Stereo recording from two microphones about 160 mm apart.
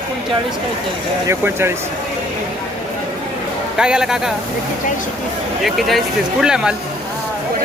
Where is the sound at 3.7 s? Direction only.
5° right (ahead or behind).